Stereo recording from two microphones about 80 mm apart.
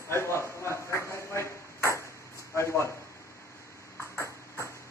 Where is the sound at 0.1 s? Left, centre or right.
Left.